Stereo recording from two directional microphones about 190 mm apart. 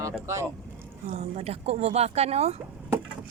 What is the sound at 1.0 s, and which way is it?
Speech, 35° right (ahead or behind).